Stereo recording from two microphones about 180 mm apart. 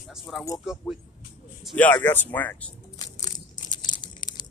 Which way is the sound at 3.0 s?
20° left (ahead or behind).